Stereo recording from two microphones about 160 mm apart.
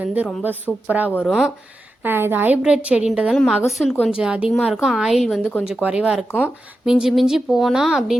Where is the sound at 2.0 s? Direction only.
15° right (ahead or behind).